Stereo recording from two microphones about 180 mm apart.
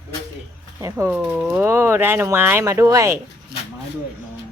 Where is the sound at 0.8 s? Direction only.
15° right (ahead or behind).